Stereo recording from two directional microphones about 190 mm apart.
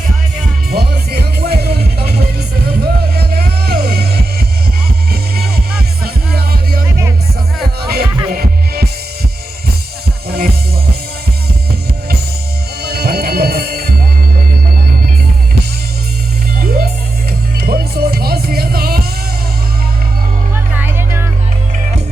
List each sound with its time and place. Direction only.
0.7 s music: 55° right (ahead or behind)
10.2 s music: 55° right (ahead or behind)
12.8 s music: 55° right (ahead or behind)
16.6 s music: 55° right (ahead or behind)
20.7 s music: 10° right (ahead or behind)